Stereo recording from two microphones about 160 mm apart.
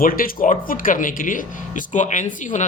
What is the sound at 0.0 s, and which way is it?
Speech, 60° left (ahead or behind).